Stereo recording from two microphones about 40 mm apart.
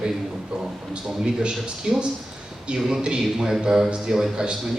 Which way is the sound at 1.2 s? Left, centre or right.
Right.